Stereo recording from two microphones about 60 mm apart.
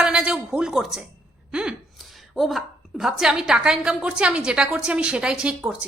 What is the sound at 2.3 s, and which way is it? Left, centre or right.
A woman's voice, centre.